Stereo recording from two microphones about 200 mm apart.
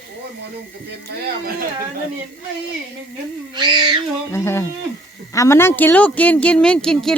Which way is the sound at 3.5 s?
25° right (ahead or behind).